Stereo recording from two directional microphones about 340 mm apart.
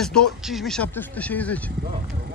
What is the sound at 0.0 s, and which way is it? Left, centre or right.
Speech, centre.